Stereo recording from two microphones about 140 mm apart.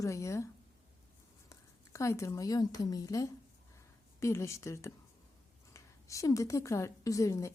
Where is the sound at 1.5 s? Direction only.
20° left (ahead or behind).